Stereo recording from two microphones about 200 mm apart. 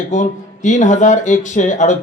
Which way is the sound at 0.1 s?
40° left (ahead or behind).